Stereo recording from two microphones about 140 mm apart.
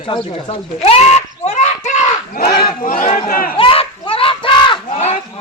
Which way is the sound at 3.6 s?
40° left (ahead or behind).